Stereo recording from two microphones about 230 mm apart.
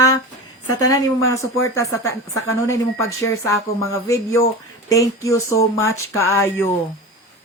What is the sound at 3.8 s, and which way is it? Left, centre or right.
A woman's voice, centre.